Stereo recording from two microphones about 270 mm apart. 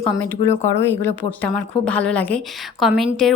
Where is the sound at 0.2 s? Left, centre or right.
Centre.